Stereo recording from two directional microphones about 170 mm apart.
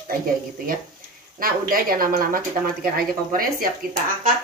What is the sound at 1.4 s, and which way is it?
Speech, 55° right (ahead or behind).